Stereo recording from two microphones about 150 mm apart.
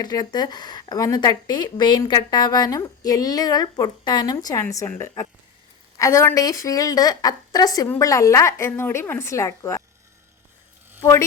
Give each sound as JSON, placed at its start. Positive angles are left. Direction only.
{"t": 0.0, "sound": "a woman's voice", "side_deg": 25}